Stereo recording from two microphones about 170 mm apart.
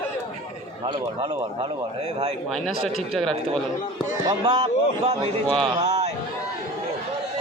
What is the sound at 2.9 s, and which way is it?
Speech, centre (ahead or behind).